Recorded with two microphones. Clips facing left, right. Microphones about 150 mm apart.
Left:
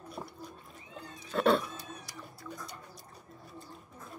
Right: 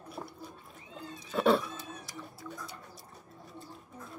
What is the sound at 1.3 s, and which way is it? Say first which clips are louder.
Cat: even; centre (ahead or behind).